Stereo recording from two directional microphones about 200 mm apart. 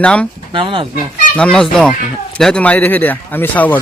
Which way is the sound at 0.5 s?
25° right (ahead or behind).